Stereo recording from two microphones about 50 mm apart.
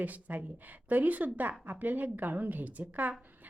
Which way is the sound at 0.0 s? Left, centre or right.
Right.